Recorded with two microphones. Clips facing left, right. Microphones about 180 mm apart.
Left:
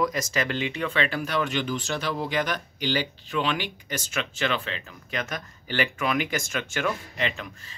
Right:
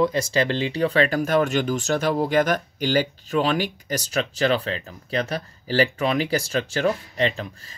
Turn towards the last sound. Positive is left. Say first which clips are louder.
# right 6 dB
turn(degrees=-35)  # may be behind; listen again after turning